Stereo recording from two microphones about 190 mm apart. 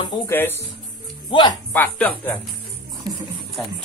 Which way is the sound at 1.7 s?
10° left (ahead or behind).